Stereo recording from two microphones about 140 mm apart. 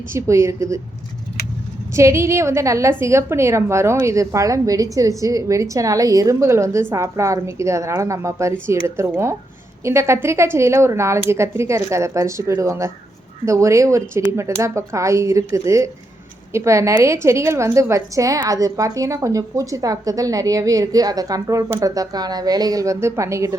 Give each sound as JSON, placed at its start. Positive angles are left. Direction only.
{"t": 0.1, "sound": "a woman's voice", "side_deg": -20}
{"t": 1.9, "sound": "a woman's voice", "side_deg": -20}